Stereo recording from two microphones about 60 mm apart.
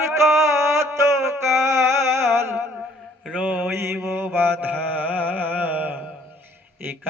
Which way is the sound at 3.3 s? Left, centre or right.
Right.